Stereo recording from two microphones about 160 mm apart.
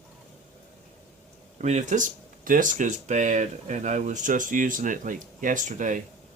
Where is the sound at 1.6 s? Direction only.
45° right (ahead or behind).